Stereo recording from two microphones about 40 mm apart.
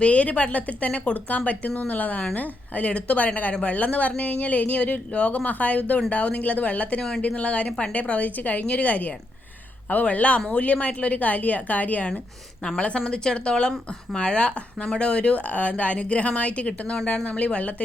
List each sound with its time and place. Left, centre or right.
0.0 s a woman's voice: left
3.8 s a woman's voice: left
13.1 s a woman's voice: centre; by 17.8 s left